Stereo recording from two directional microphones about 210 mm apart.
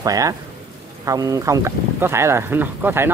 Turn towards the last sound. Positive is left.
turn(degrees=-10)  # may be behind; listen again after turning